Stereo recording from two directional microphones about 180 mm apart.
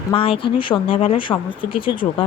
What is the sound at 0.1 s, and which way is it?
Speech, 30° left (ahead or behind).